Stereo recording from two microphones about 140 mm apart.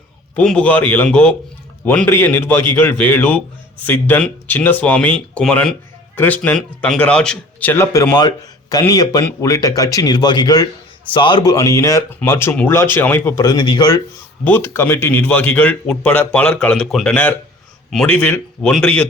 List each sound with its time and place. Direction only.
0.3 s speech: 5° left (ahead or behind); by 14.0 s 30° left (ahead or behind)
14.4 s speech: 15° left (ahead or behind)